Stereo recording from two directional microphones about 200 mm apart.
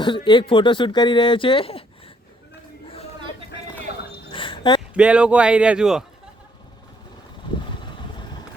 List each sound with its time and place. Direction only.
0.0 s speech: 25° left (ahead or behind)
4.3 s a sound: 25° left (ahead or behind)
4.9 s speech: 5° right (ahead or behind)